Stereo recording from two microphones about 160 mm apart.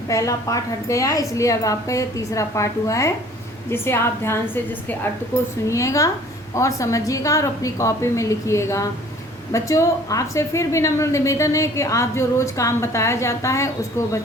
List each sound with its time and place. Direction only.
0.1 s a woman's voice: 20° left (ahead or behind)